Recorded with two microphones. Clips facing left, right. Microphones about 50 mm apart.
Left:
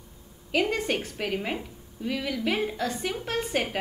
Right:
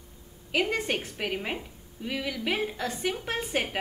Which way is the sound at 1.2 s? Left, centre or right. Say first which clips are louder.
Left 2 dB; centre.